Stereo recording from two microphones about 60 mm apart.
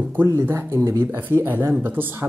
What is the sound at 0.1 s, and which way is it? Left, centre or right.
Speech, right.